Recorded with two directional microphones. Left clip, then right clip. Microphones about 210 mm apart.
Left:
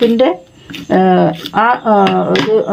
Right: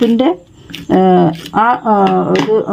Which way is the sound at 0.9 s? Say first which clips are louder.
Even; 55° right (ahead or behind).